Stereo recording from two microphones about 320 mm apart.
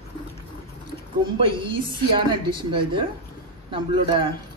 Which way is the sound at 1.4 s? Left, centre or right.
Centre.